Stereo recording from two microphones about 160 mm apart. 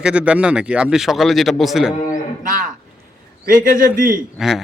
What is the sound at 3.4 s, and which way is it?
Speech, 60° right (ahead or behind).